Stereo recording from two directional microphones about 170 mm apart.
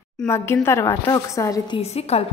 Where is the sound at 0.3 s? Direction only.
15° left (ahead or behind).